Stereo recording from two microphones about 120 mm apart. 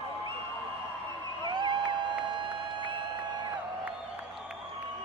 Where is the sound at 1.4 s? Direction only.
40° right (ahead or behind).